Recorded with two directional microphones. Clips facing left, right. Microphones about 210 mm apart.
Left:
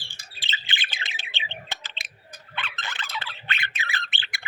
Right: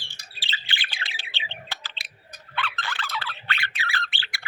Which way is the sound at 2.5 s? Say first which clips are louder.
Right 4 dB; 20° left (ahead or behind).